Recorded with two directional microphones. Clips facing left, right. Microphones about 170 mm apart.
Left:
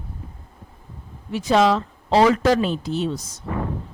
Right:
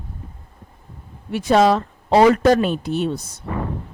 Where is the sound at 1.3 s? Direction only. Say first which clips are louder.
Right 2 dB; 60° right (ahead or behind).